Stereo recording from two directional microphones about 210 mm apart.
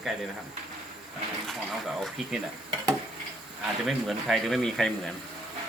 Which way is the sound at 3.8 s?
Centre (ahead or behind).